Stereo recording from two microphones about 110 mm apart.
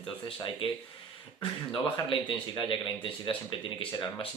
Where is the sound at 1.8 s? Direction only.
50° left (ahead or behind).